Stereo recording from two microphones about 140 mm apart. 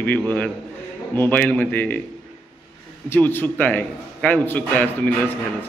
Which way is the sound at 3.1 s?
15° left (ahead or behind).